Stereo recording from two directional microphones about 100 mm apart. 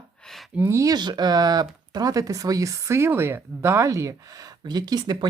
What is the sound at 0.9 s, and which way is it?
Speech, 45° right (ahead or behind).